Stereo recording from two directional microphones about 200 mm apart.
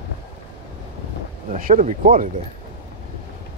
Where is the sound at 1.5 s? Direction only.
40° right (ahead or behind).